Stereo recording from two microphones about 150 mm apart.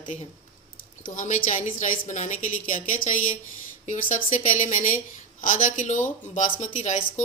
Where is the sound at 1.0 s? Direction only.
60° left (ahead or behind).